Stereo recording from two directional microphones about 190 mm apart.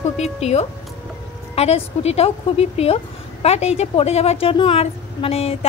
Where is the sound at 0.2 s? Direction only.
35° left (ahead or behind).